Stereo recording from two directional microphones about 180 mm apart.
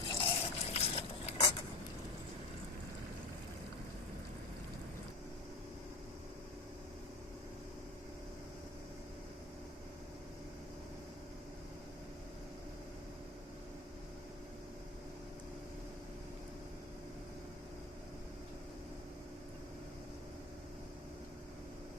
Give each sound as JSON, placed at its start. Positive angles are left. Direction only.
{"t": 0.1, "sound": "scrape", "side_deg": 30}